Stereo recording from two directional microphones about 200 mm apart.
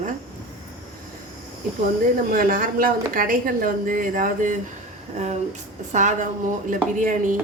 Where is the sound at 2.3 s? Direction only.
45° right (ahead or behind).